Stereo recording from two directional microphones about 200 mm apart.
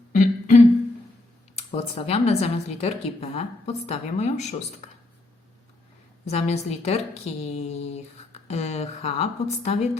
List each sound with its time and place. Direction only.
0.2 s humming: 35° left (ahead or behind)
1.5 s a woman's voice: 30° left (ahead or behind)
6.2 s a woman's voice: 35° left (ahead or behind)